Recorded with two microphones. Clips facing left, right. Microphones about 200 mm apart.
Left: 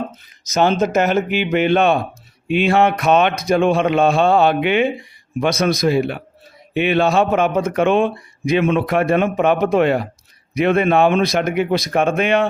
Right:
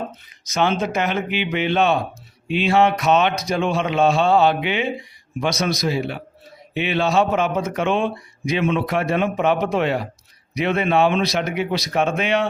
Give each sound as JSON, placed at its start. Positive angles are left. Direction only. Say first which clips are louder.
{"t": 0.4, "sound": "a man's voice", "louder": "left 4 dB", "side_deg": 40}